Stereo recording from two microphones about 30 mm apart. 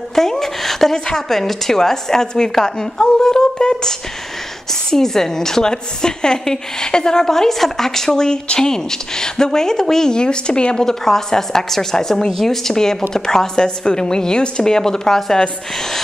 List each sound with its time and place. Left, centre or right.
0.1 s a woman's voice: centre
0.9 s speech: left
1.3 s a woman's voice: centre; by 7.2 s left
7.2 s a woman's voice: centre
10.1 s speech: left
10.9 s a woman's voice: centre